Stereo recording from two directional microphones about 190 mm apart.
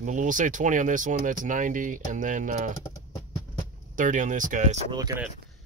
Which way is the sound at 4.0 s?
40° right (ahead or behind).